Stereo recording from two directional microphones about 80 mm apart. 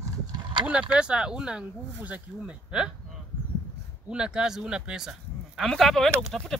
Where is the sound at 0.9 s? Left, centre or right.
Centre.